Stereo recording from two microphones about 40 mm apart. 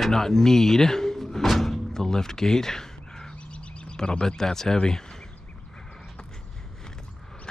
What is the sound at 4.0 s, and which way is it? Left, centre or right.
Speech, centre.